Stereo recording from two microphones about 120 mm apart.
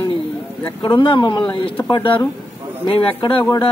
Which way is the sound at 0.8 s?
45° left (ahead or behind).